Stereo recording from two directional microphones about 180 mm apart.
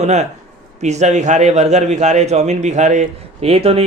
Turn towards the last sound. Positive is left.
turn(degrees=-35)  # may be behind; listen again after turning